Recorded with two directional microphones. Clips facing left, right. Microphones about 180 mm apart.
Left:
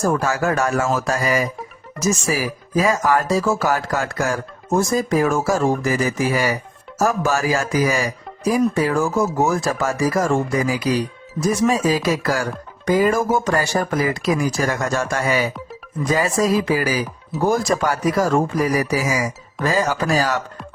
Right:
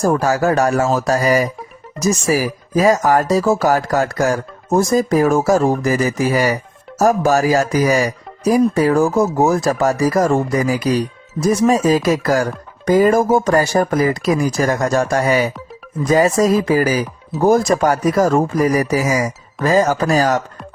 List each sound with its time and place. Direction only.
0.0 s speech: 35° right (ahead or behind)